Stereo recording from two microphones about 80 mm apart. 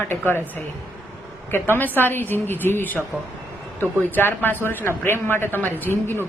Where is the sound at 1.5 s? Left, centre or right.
Left.